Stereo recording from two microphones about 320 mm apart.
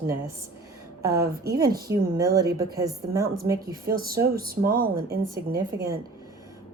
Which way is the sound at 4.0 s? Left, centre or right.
Right.